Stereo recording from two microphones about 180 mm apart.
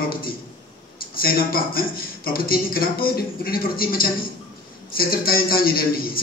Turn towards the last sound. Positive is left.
turn(degrees=55)  # may be behind; listen again after turning